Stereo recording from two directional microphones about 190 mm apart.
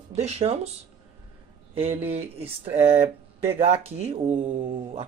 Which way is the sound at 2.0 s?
30° right (ahead or behind).